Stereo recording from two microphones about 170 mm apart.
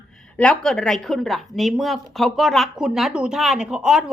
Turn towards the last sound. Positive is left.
turn(degrees=-5)  # may be behind; listen again after turning